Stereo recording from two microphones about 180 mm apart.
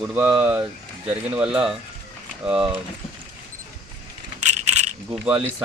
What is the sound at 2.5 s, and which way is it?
Speech, 5° right (ahead or behind).